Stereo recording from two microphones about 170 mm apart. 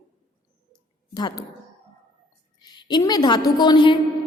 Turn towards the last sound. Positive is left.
turn(degrees=25)  # may be behind; listen again after turning